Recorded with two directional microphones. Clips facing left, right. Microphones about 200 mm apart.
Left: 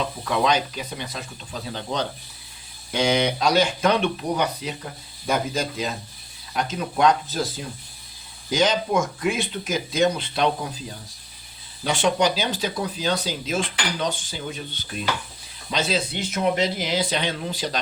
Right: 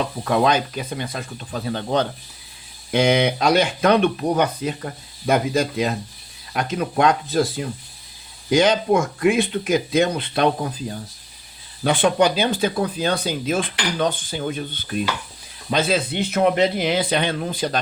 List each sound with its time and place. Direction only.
0.3 s speech: 50° right (ahead or behind)
8.4 s speech: 60° right (ahead or behind)
11.8 s speech: 55° right (ahead or behind)